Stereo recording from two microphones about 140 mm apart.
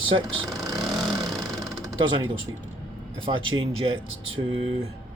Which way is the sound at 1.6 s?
25° right (ahead or behind).